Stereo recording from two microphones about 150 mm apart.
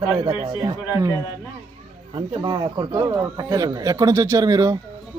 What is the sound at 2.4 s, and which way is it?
A man's voice, 30° right (ahead or behind).